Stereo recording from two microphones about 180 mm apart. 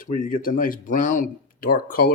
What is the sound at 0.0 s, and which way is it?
Speech, 50° left (ahead or behind).